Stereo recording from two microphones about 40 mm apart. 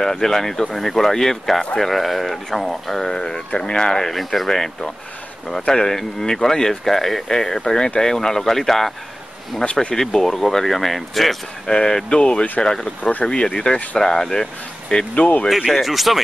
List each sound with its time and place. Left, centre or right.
0.0 s speech: centre
4.1 s speech: centre
9.6 s speech: left
9.9 s speech: centre
11.6 s speech: centre
13.0 s speech: left
13.3 s speech: left
15.1 s speech: left
15.7 s speech: centre